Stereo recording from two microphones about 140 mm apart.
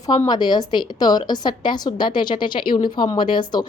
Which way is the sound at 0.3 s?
30° left (ahead or behind).